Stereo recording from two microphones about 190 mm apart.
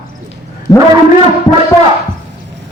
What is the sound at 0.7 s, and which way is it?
Speech, 15° left (ahead or behind).